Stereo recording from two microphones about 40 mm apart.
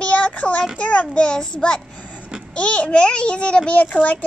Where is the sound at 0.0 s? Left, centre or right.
Left.